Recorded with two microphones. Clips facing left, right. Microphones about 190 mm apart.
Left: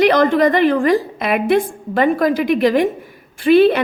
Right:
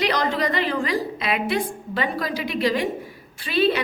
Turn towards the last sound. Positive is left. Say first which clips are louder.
# left 10 dB
turn(degrees=55)  # may be behind; listen again after turning